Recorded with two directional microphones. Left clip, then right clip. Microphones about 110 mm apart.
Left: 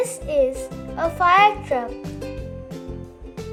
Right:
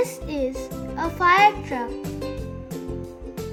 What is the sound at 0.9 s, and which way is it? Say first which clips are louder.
Speech: left 2 dB; 45° left (ahead or behind).